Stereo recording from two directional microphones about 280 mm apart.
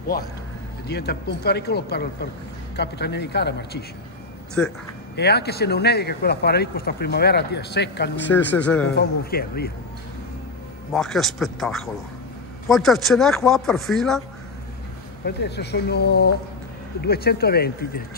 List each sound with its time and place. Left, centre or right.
0.0 s a man's voice: left
4.6 s speech: centre
5.1 s a man's voice: left
8.3 s speech: centre
8.9 s a man's voice: left
10.9 s speech: centre
15.2 s a man's voice: left